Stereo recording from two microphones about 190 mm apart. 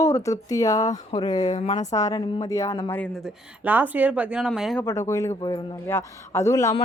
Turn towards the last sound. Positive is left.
turn(degrees=15)  # may be behind; listen again after turning